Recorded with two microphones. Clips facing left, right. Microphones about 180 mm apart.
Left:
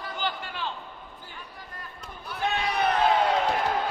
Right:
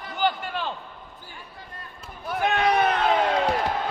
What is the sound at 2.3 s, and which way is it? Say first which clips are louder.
Run: right 5 dB; 50° right (ahead or behind).